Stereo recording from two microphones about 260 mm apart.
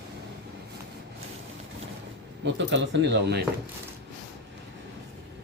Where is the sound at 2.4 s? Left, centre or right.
Right.